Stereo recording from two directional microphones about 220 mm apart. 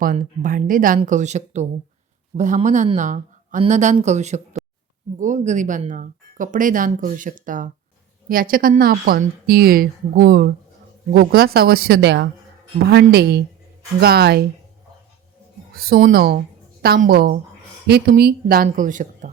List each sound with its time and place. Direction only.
0.0 s speech: 35° right (ahead or behind)
15.7 s speech: 40° right (ahead or behind)